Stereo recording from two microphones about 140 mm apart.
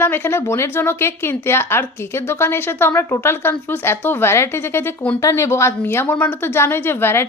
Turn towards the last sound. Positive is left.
turn(degrees=15)  # may be behind; listen again after turning